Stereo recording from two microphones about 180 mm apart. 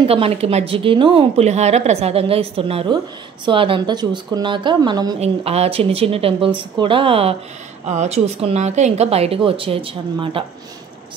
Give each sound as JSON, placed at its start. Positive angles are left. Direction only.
{"t": 0.0, "sound": "a woman's voice", "side_deg": -35}
{"t": 5.2, "sound": "a woman's voice", "side_deg": -35}